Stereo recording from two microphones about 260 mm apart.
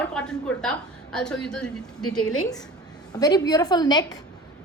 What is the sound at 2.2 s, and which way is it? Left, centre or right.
Speech, left.